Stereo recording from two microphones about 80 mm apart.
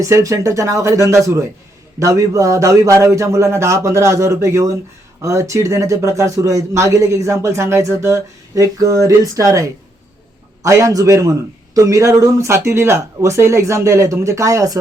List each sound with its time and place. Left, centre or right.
0.0 s speech: right